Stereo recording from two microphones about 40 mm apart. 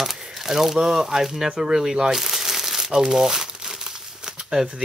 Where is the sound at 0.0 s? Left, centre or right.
Centre.